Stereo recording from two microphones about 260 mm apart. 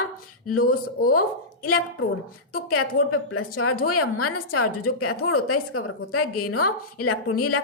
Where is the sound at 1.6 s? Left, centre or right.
Left.